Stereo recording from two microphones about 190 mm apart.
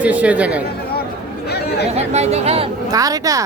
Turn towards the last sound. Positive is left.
turn(degrees=-20)  # may be behind; listen again after turning